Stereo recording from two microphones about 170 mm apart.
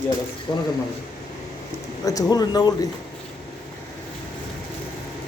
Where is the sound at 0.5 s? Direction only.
20° left (ahead or behind).